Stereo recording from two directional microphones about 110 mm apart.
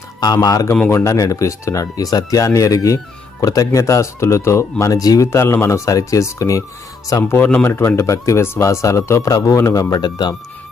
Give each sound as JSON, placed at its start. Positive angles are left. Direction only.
{"t": 0.3, "sound": "speech", "side_deg": 30}